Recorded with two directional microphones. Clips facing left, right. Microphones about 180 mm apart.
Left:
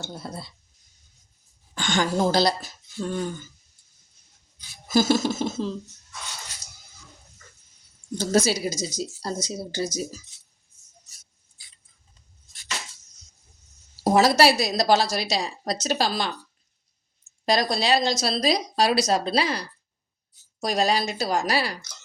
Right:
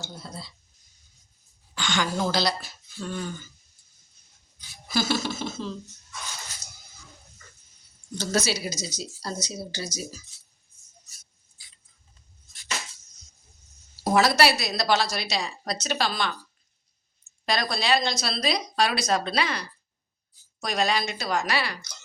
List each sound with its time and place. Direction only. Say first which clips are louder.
0.0 s speech: left 4 dB; 55° left (ahead or behind)
1.7 s speech: left 4 dB; 50° left (ahead or behind)
4.9 s a sound: left 6 dB; 45° left (ahead or behind)
8.2 s a woman's voice: left 5 dB; 45° left (ahead or behind)
14.0 s speech: left 3 dB; 40° left (ahead or behind)
17.4 s speech: left 4 dB; 40° left (ahead or behind)